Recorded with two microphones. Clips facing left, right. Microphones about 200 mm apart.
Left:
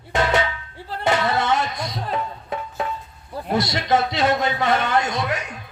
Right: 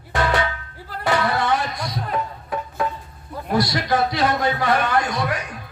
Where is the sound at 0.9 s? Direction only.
25° left (ahead or behind).